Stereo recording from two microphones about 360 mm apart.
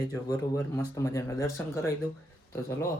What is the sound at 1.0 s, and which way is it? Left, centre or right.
Speech, centre.